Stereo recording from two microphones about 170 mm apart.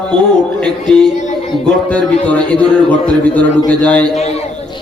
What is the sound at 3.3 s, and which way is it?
Speech, 10° left (ahead or behind).